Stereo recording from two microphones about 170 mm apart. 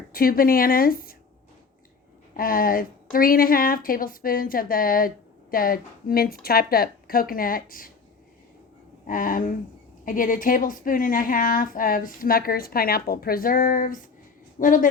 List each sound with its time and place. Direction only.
0.1 s a woman's voice: 60° left (ahead or behind)
2.3 s a woman's voice: 55° left (ahead or behind)
9.0 s a woman's voice: 55° left (ahead or behind)